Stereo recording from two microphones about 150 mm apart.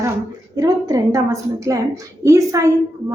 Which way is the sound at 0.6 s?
25° right (ahead or behind).